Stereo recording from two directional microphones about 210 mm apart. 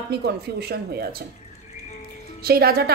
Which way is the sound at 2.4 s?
45° right (ahead or behind).